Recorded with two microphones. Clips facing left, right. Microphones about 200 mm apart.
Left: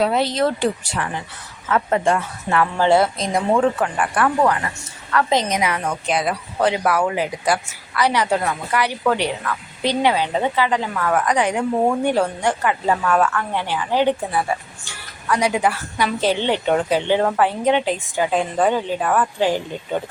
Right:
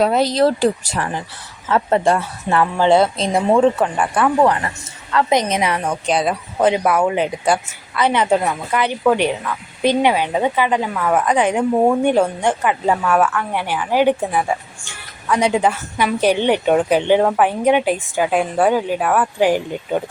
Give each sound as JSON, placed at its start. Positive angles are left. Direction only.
{"t": 0.0, "sound": "a woman's voice", "side_deg": -40}
{"t": 2.7, "sound": "a woman's voice", "side_deg": -20}
{"t": 13.0, "sound": "a woman's voice", "side_deg": -5}